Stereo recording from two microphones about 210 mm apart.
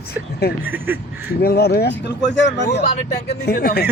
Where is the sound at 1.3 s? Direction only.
50° left (ahead or behind).